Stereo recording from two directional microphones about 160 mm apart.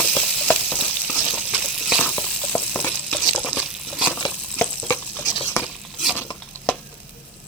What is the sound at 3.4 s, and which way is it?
Liquid, 5° right (ahead or behind).